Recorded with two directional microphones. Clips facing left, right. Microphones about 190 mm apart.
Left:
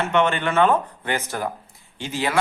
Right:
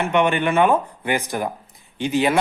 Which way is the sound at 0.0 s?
15° right (ahead or behind).